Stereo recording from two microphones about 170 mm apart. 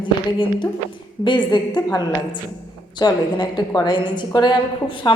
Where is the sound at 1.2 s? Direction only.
25° left (ahead or behind).